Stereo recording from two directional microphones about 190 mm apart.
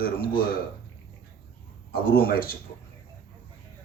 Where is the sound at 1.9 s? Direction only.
55° left (ahead or behind).